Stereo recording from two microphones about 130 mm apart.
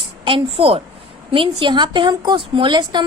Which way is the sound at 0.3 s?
45° right (ahead or behind).